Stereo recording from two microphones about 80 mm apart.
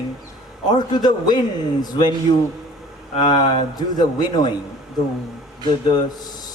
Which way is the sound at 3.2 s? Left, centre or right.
Left.